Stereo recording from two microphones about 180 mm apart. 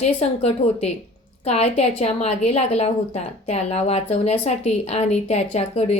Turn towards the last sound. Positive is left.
turn(degrees=35)  # may be behind; listen again after turning